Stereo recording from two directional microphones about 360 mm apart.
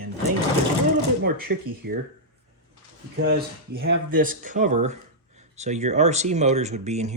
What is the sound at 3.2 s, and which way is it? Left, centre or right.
Speech, right.